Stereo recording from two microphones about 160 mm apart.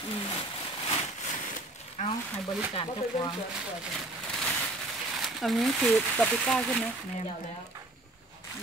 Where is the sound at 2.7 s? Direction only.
30° left (ahead or behind).